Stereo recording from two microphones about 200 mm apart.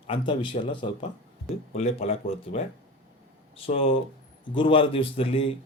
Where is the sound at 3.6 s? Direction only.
30° left (ahead or behind).